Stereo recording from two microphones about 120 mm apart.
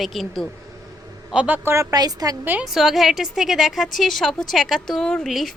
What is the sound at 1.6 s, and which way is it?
Speech, 30° right (ahead or behind).